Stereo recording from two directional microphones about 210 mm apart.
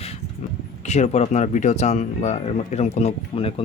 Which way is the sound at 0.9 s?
30° left (ahead or behind).